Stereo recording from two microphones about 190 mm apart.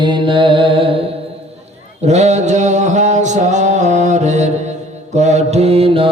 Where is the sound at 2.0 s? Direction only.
35° right (ahead or behind).